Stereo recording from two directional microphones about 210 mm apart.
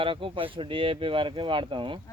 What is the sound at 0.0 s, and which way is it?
Speech, 25° right (ahead or behind).